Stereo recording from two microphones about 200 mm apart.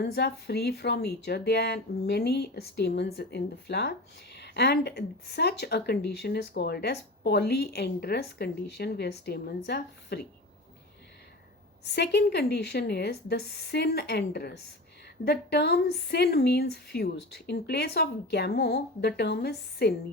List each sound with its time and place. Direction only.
0.0 s a woman's voice: 55° left (ahead or behind)
11.9 s a woman's voice: 60° left (ahead or behind)